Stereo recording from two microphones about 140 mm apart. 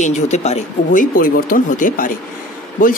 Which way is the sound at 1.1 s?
90° left.